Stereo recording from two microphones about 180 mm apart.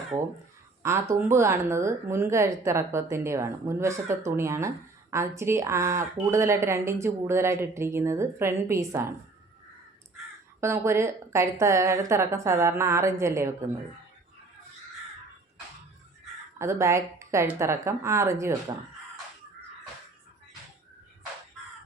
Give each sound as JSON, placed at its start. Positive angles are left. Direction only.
{"t": 0.8, "sound": "speech", "side_deg": -15}
{"t": 10.6, "sound": "speech", "side_deg": -15}
{"t": 16.6, "sound": "speech", "side_deg": -15}